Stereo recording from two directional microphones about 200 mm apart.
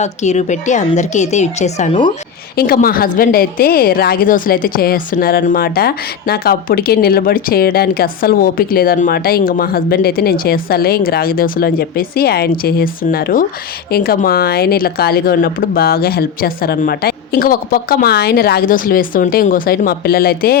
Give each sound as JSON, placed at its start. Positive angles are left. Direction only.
{"t": 0.0, "sound": "a woman's voice", "side_deg": 35}
{"t": 2.6, "sound": "a woman's voice", "side_deg": 50}